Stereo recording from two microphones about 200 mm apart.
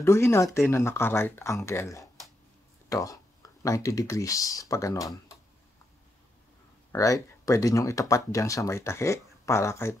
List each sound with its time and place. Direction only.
0.0 s speech: 15° left (ahead or behind)
6.9 s speech: 15° left (ahead or behind)